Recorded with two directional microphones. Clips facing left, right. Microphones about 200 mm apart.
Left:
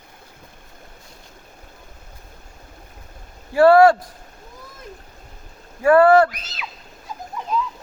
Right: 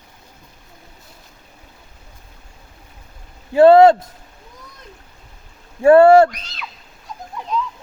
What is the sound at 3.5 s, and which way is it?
Speech, 20° right (ahead or behind).